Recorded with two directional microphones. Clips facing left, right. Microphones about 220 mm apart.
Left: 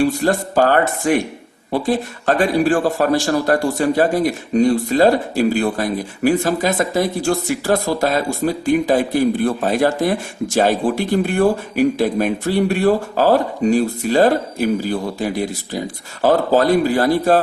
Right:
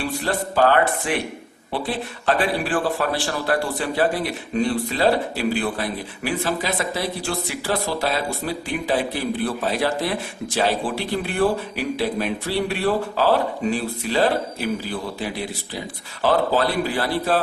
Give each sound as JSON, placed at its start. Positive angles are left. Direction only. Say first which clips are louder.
{"t": 0.0, "sound": "a man's voice", "louder": "left 8 dB", "side_deg": 45}